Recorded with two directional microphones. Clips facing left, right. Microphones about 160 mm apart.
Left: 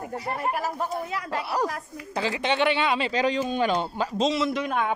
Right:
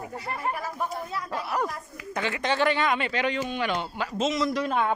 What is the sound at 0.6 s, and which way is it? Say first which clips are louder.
Speech: left 3 dB; 90° left.